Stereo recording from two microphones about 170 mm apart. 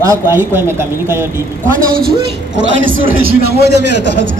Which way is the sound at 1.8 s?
60° right (ahead or behind).